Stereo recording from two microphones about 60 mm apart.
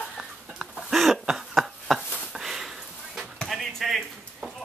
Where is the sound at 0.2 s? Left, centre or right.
Centre.